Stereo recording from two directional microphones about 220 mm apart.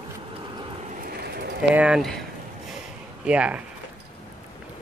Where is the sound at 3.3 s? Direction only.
5° right (ahead or behind).